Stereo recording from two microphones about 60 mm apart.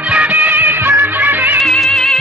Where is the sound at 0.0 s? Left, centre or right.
Right.